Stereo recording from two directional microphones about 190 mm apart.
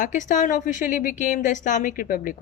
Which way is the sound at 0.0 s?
40° left (ahead or behind).